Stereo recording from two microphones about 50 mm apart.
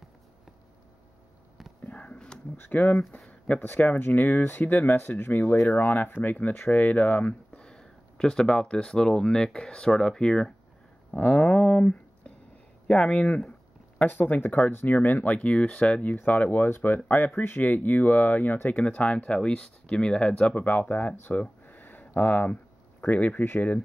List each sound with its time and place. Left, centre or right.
1.9 s a sound: left
2.5 s speech: left
3.3 s a sound: left
3.6 s speech: left
7.5 s speech: centre
11.1 s speech: left
13.5 s speech: left
21.2 s a sound: left
22.0 s speech: left